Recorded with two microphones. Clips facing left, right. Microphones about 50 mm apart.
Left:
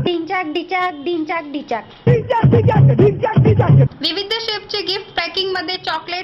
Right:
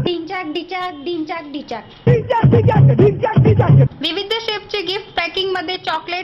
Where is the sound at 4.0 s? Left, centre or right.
Right.